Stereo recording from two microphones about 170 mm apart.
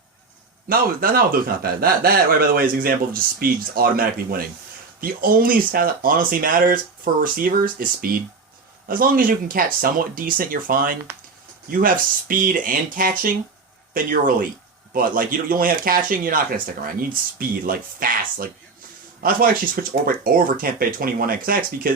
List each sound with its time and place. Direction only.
0.7 s speech: 60° right (ahead or behind)